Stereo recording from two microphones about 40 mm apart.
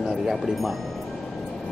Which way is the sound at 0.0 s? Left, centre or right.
Centre.